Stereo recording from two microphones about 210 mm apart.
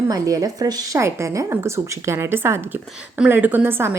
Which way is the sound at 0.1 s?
15° right (ahead or behind).